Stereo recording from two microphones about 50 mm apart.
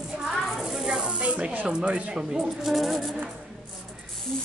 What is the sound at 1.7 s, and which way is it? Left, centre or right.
Speech, centre.